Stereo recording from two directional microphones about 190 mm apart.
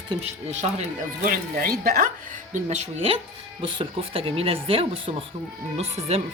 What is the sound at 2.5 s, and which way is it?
Speech, 40° right (ahead or behind).